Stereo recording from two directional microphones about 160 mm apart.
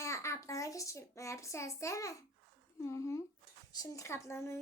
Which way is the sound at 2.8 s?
15° left (ahead or behind).